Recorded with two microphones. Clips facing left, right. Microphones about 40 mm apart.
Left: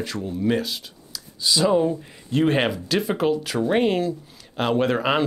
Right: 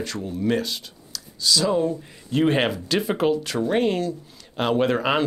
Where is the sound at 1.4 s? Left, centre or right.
Centre.